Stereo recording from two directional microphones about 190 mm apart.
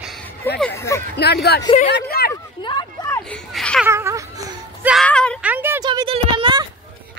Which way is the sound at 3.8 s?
15° right (ahead or behind).